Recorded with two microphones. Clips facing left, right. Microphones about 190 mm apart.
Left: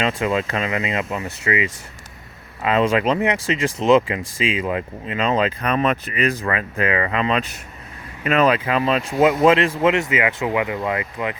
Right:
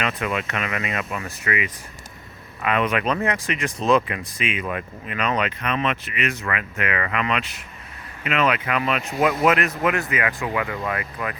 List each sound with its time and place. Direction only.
0.0 s speech: 25° left (ahead or behind)